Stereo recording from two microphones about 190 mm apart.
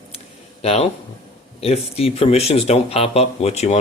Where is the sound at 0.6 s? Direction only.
35° left (ahead or behind).